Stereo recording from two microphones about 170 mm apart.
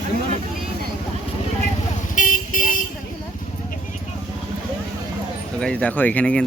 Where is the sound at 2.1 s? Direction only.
50° left (ahead or behind).